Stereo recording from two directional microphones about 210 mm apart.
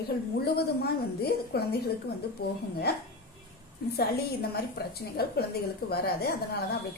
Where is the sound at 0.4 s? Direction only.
50° left (ahead or behind).